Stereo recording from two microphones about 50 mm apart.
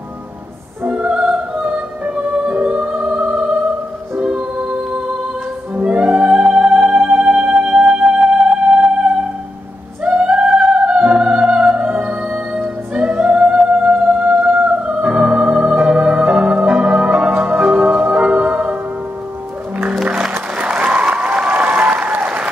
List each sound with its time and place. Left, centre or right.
0.8 s music: centre
5.8 s music: right
7.3 s music: centre
10.0 s music: centre
21.1 s applause: right